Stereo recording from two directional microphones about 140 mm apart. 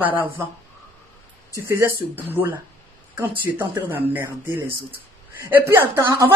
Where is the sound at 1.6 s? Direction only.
15° right (ahead or behind).